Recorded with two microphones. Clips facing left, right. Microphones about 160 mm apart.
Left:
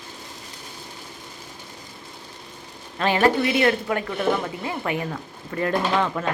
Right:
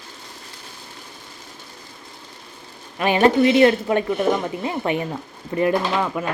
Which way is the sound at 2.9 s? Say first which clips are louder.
Right 3 dB; 15° right (ahead or behind).